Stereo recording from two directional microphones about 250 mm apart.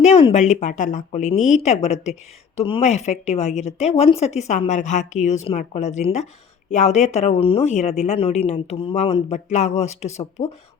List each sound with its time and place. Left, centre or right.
0.0 s a woman's voice: left